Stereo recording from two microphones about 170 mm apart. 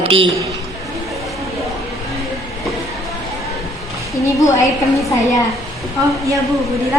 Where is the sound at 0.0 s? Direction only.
35° right (ahead or behind).